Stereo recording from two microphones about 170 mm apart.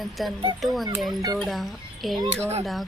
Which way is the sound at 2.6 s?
Centre (ahead or behind).